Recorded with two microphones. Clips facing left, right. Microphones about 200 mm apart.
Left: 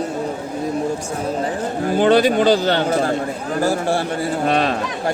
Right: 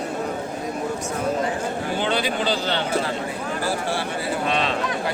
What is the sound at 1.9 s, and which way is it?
Speech, 45° left (ahead or behind).